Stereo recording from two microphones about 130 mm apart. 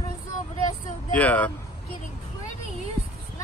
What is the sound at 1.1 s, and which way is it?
Speech, 10° left (ahead or behind).